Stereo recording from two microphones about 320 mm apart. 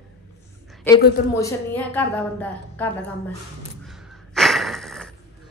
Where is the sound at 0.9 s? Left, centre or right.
Centre.